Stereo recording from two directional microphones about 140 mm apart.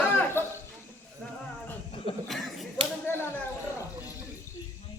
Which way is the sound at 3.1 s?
15° left (ahead or behind).